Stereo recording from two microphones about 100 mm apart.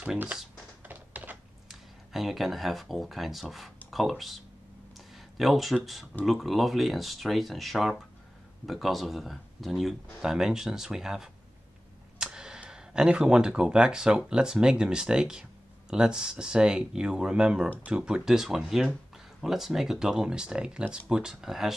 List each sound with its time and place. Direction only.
0.8 s typing: 20° right (ahead or behind)
1.7 s speech: centre (ahead or behind)
4.9 s a sound: centre (ahead or behind)
6.2 s speech: centre (ahead or behind)